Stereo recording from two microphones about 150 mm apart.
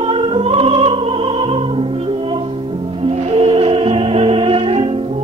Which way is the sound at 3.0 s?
40° right (ahead or behind).